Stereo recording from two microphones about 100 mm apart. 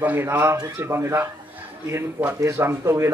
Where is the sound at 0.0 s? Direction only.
20° right (ahead or behind).